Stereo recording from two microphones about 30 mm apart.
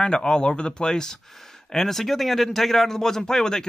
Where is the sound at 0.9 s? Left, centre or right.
Centre.